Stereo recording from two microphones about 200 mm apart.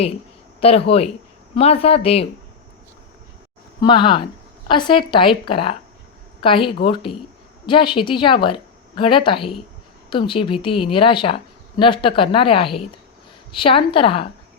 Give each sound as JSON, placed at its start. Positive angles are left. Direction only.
{"t": 0.6, "sound": "a woman's voice", "side_deg": 30}
{"t": 3.8, "sound": "a woman's voice", "side_deg": 25}
{"t": 9.4, "sound": "speech", "side_deg": 0}
{"t": 10.1, "sound": "a woman's voice", "side_deg": 25}